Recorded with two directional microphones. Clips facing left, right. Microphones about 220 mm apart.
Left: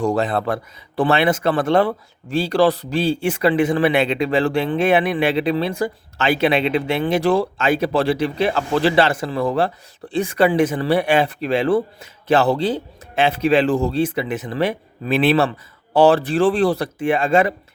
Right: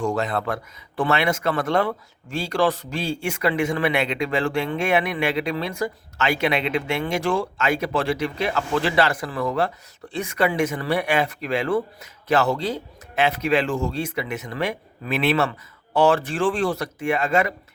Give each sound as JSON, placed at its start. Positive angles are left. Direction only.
{"t": 0.0, "sound": "speech", "side_deg": 35}